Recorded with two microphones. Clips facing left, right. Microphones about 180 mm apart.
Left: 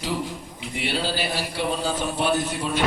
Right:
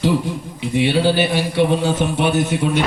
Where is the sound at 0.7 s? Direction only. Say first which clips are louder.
Right 11 dB; 65° right (ahead or behind).